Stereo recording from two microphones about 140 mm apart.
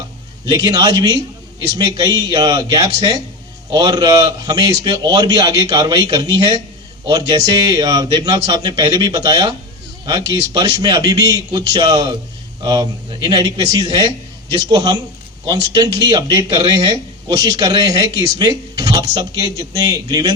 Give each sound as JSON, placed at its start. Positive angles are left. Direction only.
{"t": 0.4, "sound": "speech", "side_deg": -30}